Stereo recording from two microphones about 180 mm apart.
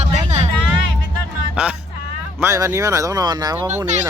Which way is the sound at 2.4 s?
15° right (ahead or behind).